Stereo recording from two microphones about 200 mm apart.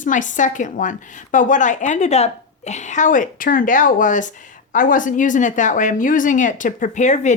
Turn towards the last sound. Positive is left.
turn(degrees=35)  # may be behind; listen again after turning